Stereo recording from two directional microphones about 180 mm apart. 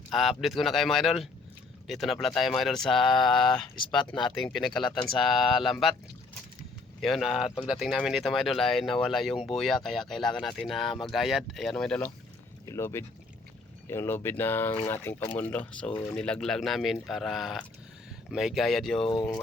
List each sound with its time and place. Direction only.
0.1 s speech: centre (ahead or behind)
3.0 s speech: 25° left (ahead or behind)
4.5 s speech: 5° left (ahead or behind)
7.0 s speech: centre (ahead or behind)
12.6 s speech: 15° left (ahead or behind)